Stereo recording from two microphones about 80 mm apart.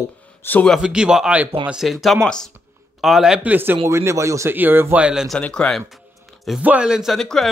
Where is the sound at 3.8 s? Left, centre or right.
Right.